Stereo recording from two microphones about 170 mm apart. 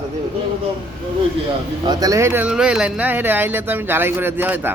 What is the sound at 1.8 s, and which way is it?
Speech, 20° right (ahead or behind).